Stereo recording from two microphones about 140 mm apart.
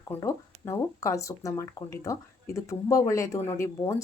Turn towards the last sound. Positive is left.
turn(degrees=20)  # may be behind; listen again after turning